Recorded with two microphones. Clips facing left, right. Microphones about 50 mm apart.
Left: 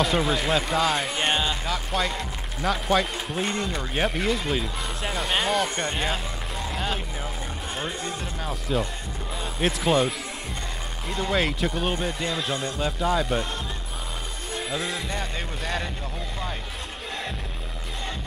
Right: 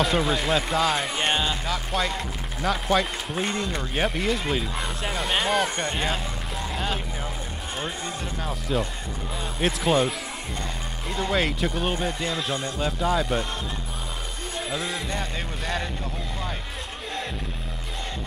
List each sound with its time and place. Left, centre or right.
0.0 s speech: centre
14.7 s speech: centre